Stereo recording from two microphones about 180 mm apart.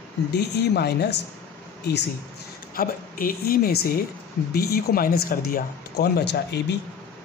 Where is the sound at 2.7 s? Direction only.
50° left (ahead or behind); by 6.7 s 70° left (ahead or behind).